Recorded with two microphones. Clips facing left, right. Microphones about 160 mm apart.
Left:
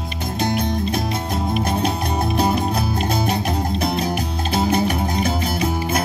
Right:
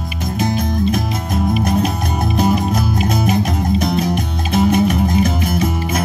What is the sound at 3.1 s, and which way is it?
Music, 30° left (ahead or behind).